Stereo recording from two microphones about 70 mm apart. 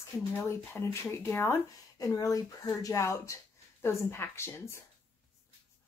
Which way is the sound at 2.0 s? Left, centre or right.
Left.